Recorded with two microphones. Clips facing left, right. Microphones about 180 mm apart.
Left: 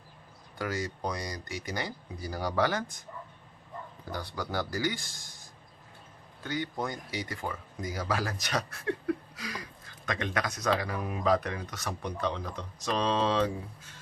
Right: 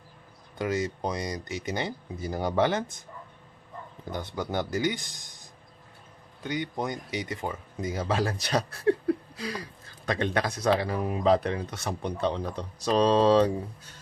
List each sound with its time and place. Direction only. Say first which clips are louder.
0.6 s speech: right 5 dB; 20° right (ahead or behind)
4.1 s speech: right 4 dB; 20° right (ahead or behind)